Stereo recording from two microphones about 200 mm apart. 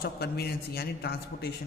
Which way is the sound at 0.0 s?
50° left (ahead or behind).